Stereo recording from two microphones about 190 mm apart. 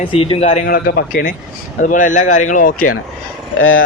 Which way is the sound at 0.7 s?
55° left (ahead or behind).